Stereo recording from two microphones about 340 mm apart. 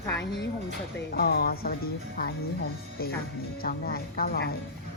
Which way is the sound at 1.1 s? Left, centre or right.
Left.